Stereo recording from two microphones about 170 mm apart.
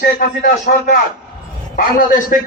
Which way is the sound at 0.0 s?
50° left (ahead or behind).